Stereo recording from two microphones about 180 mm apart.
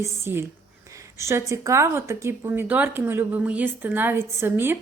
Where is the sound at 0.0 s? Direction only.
15° right (ahead or behind).